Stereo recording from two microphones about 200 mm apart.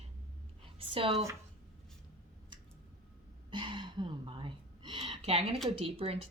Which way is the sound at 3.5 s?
25° right (ahead or behind).